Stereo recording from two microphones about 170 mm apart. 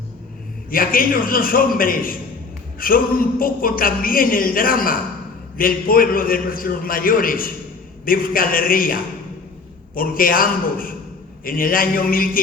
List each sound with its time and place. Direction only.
0.7 s speech: 55° left (ahead or behind)